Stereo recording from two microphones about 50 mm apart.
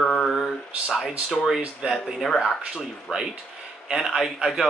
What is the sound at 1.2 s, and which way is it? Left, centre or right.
Speech, centre.